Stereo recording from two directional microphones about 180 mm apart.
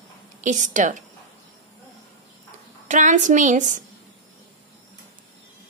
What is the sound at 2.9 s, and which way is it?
Speech, 45° right (ahead or behind).